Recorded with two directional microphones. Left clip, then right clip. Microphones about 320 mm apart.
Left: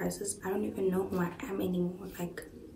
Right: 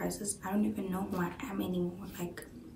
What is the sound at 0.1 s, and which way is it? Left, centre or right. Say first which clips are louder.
Speech: left 2 dB; centre.